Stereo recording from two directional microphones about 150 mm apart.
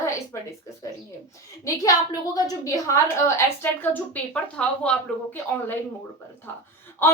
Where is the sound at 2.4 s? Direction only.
25° left (ahead or behind); by 4.9 s 10° left (ahead or behind).